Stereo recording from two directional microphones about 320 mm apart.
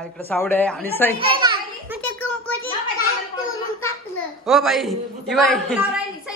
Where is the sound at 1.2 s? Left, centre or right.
Centre.